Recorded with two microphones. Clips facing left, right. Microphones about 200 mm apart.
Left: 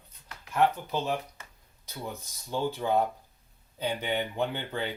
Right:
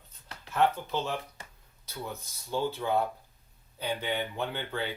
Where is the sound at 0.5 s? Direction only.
15° left (ahead or behind).